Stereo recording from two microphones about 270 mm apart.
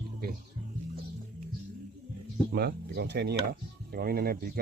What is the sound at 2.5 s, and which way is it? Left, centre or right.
Speech, right.